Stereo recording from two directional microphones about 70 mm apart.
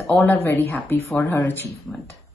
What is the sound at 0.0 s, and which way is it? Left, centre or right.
A woman's voice, left.